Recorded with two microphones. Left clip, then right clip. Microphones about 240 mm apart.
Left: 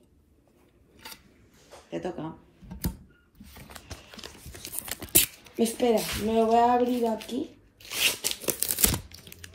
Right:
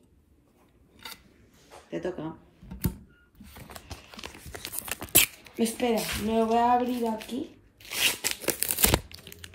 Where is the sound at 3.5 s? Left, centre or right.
Right.